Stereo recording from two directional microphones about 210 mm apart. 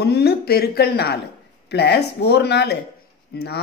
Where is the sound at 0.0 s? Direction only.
50° left (ahead or behind).